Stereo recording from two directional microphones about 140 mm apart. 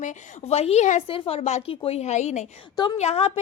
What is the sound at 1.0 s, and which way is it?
A woman's voice, 40° left (ahead or behind).